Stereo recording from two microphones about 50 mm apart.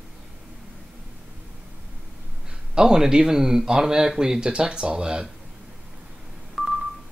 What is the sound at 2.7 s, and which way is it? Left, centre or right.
Speech, centre.